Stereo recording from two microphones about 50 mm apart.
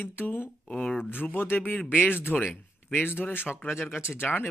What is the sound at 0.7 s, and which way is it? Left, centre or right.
Speech, centre.